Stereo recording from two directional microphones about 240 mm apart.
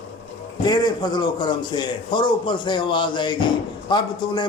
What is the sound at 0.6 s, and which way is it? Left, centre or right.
A man's voice, centre.